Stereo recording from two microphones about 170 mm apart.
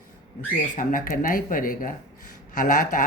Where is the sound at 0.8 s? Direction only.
50° left (ahead or behind).